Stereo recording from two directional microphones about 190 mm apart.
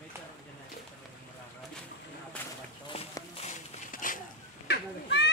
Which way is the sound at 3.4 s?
45° left (ahead or behind).